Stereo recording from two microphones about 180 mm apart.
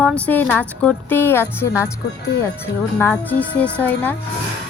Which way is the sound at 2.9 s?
10° left (ahead or behind).